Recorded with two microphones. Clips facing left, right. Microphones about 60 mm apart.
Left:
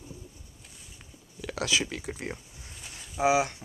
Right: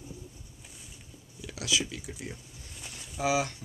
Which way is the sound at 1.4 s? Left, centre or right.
Left.